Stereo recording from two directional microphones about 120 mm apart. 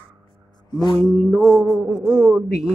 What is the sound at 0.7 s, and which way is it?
Mantra, 35° left (ahead or behind).